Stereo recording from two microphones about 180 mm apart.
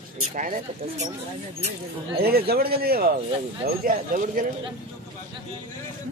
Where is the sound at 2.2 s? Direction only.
60° right (ahead or behind).